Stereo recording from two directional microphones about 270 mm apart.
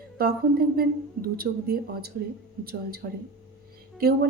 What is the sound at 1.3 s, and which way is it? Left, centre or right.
Speech, right.